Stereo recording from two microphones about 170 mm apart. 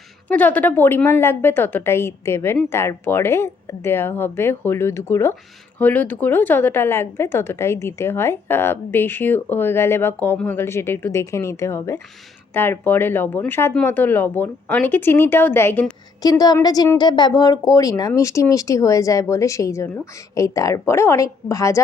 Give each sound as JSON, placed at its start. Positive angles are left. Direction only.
{"t": 0.3, "sound": "a woman's voice", "side_deg": 10}
{"t": 16.4, "sound": "a woman's voice", "side_deg": 20}